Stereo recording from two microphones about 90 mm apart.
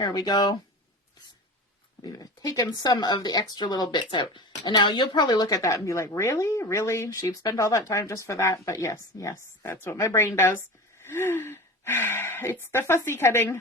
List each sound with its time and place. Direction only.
0.0 s speech: 45° left (ahead or behind)
2.0 s speech: 45° left (ahead or behind); by 13.6 s 30° left (ahead or behind)